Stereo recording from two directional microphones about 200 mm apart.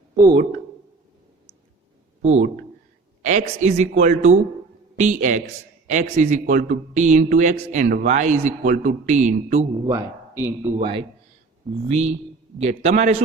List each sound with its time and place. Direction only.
0.2 s a man's voice: 20° right (ahead or behind)
2.2 s speech: 35° right (ahead or behind)
9.8 s speech: 15° right (ahead or behind)
10.8 s a man's voice: 30° right (ahead or behind)